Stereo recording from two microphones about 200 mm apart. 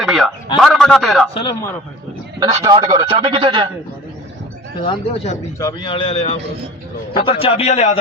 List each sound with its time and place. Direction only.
0.0 s a sound: centre (ahead or behind)
0.6 s a man's voice: centre (ahead or behind)
1.3 s a man's voice: 25° left (ahead or behind)
2.6 s a man's voice: 20° right (ahead or behind)
4.8 s speech: 30° left (ahead or behind)
5.5 s a man's voice: 20° left (ahead or behind)